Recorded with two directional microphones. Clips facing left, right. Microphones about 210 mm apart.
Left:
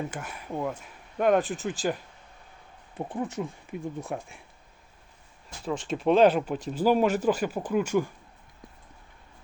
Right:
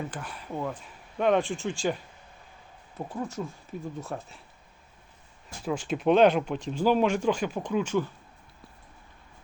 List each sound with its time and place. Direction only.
0.1 s speech: 10° left (ahead or behind)
3.1 s speech: 15° left (ahead or behind)
5.6 s speech: 5° right (ahead or behind); by 8.1 s 10° left (ahead or behind)